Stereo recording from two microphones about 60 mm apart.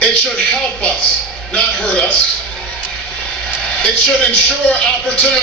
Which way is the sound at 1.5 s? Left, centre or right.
Centre.